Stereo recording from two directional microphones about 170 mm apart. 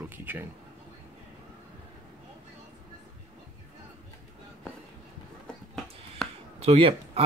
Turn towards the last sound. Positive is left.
turn(degrees=-35)  # may be behind; listen again after turning